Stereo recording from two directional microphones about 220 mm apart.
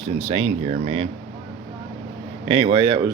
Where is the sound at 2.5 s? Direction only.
25° right (ahead or behind).